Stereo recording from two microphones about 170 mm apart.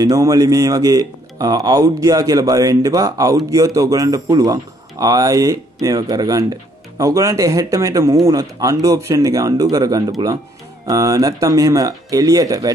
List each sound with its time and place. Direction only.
0.0 s speech: 20° right (ahead or behind)